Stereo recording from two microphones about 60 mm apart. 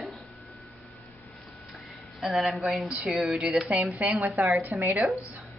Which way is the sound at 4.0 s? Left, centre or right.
Right.